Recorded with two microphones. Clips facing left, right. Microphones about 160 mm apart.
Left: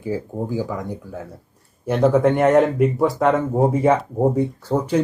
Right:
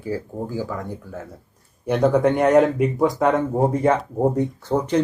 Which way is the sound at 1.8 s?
Centre (ahead or behind).